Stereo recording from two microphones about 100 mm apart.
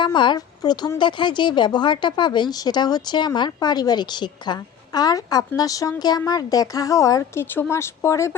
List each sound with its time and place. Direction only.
0.0 s speech: 50° left (ahead or behind)
0.9 s speech: 50° left (ahead or behind); by 8.4 s 30° left (ahead or behind)